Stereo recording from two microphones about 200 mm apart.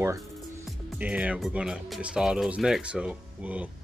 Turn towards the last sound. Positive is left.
turn(degrees=-5)  # may be behind; listen again after turning